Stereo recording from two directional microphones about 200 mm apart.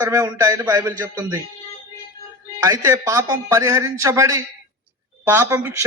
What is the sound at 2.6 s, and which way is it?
A man's voice, 15° right (ahead or behind).